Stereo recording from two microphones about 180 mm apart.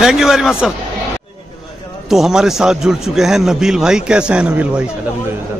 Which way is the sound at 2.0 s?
Centre (ahead or behind).